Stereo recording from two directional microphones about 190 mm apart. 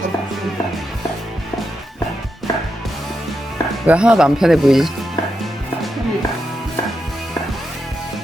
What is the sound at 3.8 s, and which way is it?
Speech, 5° right (ahead or behind).